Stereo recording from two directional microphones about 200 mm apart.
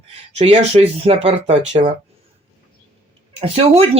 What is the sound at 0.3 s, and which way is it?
Speech, 30° right (ahead or behind).